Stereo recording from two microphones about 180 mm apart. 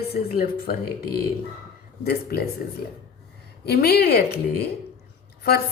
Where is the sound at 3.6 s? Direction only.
60° left (ahead or behind).